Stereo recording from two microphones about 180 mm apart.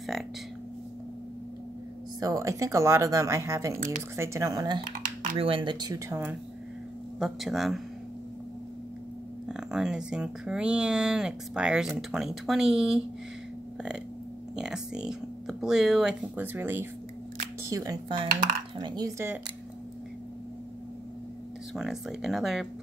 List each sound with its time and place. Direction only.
2.1 s speech: 20° right (ahead or behind)
3.7 s speech: 45° right (ahead or behind)
4.2 s speech: 15° right (ahead or behind)
4.9 s typing: 50° right (ahead or behind)
5.4 s speech: 30° right (ahead or behind)
7.2 s speech: centre (ahead or behind)
9.5 s speech: 5° right (ahead or behind)
14.5 s speech: 5° right (ahead or behind)
21.7 s speech: centre (ahead or behind)